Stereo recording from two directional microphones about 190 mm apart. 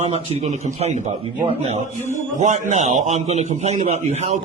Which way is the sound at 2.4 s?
35° right (ahead or behind).